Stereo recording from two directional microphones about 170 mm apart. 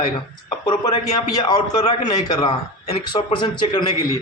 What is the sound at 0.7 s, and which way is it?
Speech, 25° left (ahead or behind).